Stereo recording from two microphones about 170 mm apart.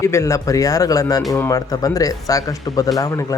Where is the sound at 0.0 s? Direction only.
20° left (ahead or behind).